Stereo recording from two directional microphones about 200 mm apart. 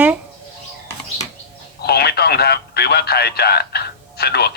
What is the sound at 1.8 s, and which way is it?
Speech, 55° left (ahead or behind).